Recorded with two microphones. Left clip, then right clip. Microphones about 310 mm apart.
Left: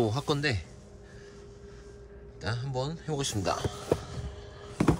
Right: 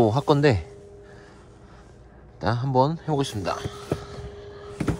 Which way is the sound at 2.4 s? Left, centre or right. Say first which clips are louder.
Right 13 dB; centre.